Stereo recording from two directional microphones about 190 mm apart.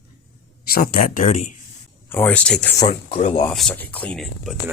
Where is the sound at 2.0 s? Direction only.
10° left (ahead or behind).